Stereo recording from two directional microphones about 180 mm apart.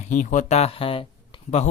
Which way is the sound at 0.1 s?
45° left (ahead or behind).